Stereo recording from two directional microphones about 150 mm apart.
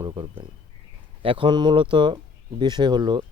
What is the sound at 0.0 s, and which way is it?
Speech, 35° right (ahead or behind).